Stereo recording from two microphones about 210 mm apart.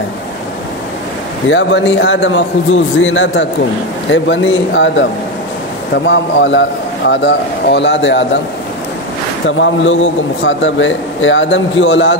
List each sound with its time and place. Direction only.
1.5 s a man's voice: 60° left (ahead or behind)
6.0 s a man's voice: 60° left (ahead or behind)
9.5 s a man's voice: 65° left (ahead or behind)